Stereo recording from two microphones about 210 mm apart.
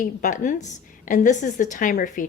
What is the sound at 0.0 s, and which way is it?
A woman's voice, 35° left (ahead or behind).